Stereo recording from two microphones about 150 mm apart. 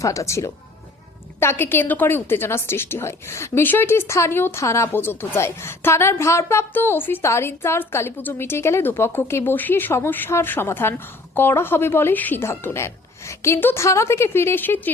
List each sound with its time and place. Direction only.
0.0 s a woman's voice: 20° left (ahead or behind)